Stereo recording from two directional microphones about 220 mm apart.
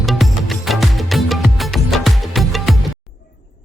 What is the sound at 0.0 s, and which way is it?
Music, centre (ahead or behind).